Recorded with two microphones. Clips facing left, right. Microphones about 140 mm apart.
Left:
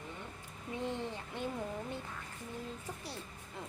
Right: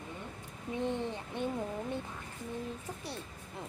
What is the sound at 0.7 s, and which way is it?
Speech, 20° right (ahead or behind).